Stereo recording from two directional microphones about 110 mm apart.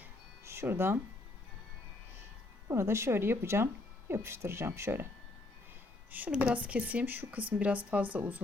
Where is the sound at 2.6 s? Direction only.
25° right (ahead or behind).